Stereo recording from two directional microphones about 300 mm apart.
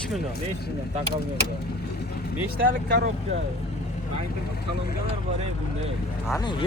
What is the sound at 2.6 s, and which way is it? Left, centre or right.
Speech, right.